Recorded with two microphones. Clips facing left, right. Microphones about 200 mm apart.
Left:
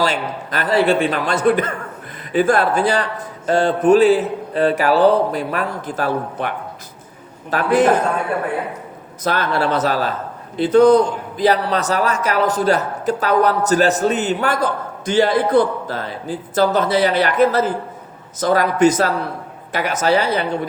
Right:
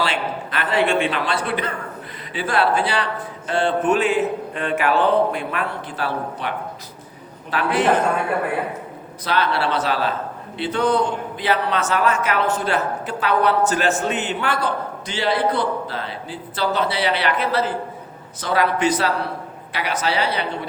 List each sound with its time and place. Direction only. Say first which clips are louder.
0.0 s a man's voice: left 3 dB; 40° left (ahead or behind)
7.5 s a woman's voice: left 5 dB; 45° left (ahead or behind)
9.2 s a woman's voice: left 2 dB; 45° left (ahead or behind)